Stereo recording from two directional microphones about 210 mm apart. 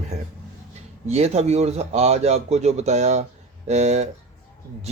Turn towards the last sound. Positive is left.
turn(degrees=-30)  # may be behind; listen again after turning